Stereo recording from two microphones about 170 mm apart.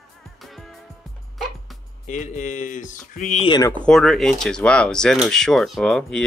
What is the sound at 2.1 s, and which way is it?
Speech, 45° left (ahead or behind).